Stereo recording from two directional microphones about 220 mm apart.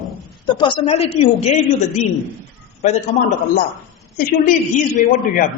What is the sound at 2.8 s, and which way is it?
A man's voice, 30° left (ahead or behind).